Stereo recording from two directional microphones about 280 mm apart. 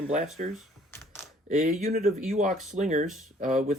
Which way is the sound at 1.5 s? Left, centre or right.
Right.